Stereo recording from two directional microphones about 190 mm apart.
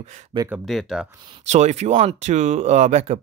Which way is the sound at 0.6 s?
Centre (ahead or behind).